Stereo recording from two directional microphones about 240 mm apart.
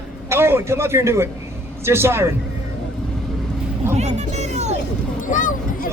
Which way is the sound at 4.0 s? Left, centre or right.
Right.